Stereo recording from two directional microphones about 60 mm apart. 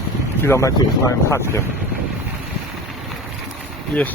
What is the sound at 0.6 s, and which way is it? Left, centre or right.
Speech, left.